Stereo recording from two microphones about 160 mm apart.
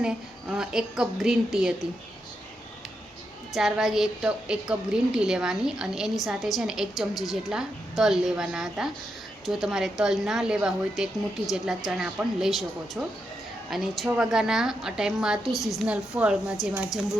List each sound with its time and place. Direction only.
0.0 s a woman's voice: 5° right (ahead or behind)
3.5 s a woman's voice: centre (ahead or behind)
7.1 s a woman's voice: 25° left (ahead or behind)
7.5 s a woman's voice: 5° right (ahead or behind)
15.5 s a woman's voice: 20° left (ahead or behind)
15.9 s speech: 5° right (ahead or behind)